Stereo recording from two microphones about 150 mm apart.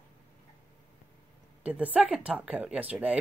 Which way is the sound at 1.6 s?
10° right (ahead or behind).